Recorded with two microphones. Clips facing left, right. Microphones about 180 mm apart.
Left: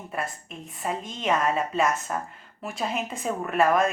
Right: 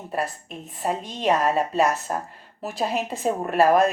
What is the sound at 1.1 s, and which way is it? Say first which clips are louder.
A woman's voice: right 3 dB; 30° right (ahead or behind).